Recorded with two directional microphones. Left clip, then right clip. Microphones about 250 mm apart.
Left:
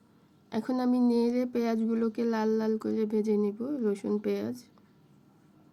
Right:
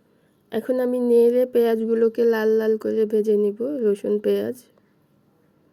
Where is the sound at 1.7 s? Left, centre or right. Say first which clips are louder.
Right 11 dB; right.